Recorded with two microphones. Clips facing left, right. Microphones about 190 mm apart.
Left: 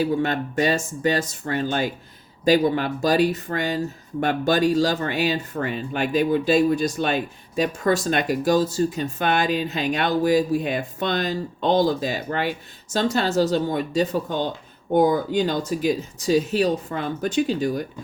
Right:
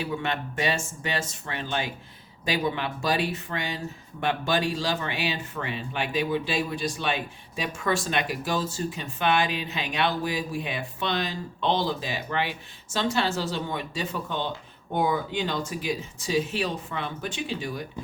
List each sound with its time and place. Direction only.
0.0 s speech: 40° left (ahead or behind)